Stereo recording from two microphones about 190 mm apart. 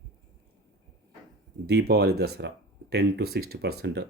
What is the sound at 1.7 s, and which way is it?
Speech, 60° right (ahead or behind).